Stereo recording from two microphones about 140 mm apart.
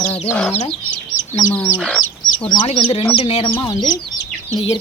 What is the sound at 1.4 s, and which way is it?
Speech, 60° left (ahead or behind).